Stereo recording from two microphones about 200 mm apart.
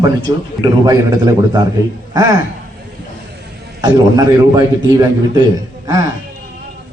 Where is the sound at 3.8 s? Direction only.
20° right (ahead or behind).